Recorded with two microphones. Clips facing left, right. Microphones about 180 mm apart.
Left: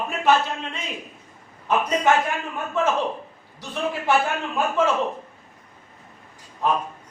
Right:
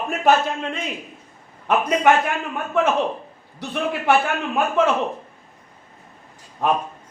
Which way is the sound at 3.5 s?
65° right (ahead or behind).